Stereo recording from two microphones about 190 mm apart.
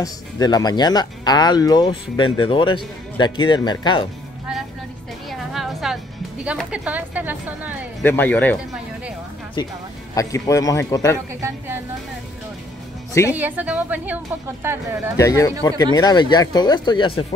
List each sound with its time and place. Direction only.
0.0 s speech: 20° left (ahead or behind)
5.3 s a sound: centre (ahead or behind)
6.4 s speech: 5° right (ahead or behind)
8.0 s a man's voice: 10° left (ahead or behind)
9.6 s a man's voice: 20° left (ahead or behind)
13.3 s speech: 10° right (ahead or behind)
15.1 s a man's voice: 15° left (ahead or behind)